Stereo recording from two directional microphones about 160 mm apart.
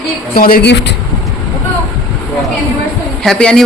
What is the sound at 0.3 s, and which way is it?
Speech, 65° left (ahead or behind).